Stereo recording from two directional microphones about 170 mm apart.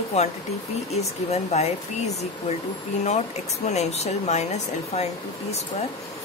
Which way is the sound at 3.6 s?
40° left (ahead or behind).